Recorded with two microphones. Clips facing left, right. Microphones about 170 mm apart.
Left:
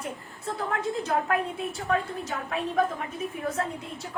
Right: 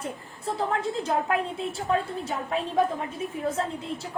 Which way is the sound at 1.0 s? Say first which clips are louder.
Left 1 dB; 30° right (ahead or behind).